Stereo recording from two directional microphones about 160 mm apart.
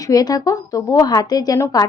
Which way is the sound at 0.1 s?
25° left (ahead or behind).